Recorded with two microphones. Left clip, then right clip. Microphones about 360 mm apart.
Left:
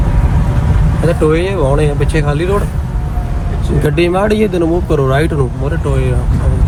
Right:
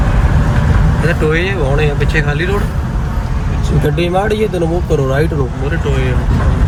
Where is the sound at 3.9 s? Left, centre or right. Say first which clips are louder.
Left 3 dB; left.